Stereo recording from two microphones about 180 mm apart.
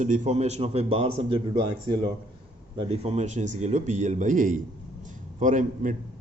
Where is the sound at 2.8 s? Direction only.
35° right (ahead or behind).